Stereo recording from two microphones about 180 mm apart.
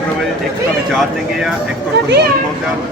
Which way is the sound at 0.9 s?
Centre (ahead or behind).